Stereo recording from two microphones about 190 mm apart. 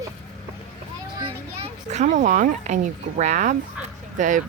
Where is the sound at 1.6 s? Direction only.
40° right (ahead or behind).